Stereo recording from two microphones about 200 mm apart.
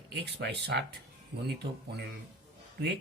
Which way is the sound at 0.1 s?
55° right (ahead or behind).